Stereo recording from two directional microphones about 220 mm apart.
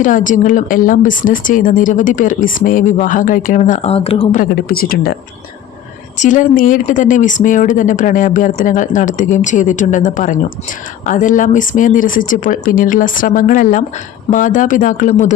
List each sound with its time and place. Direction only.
0.0 s speech: 35° left (ahead or behind)
6.1 s speech: 35° left (ahead or behind)